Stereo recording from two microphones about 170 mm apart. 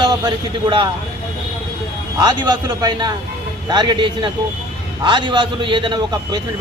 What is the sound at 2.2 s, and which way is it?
A man's voice, 25° right (ahead or behind).